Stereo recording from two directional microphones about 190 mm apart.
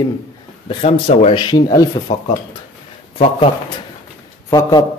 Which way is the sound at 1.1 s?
30° left (ahead or behind).